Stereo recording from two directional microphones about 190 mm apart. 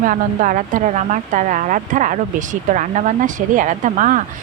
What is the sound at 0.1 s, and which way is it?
Speech, 45° right (ahead or behind).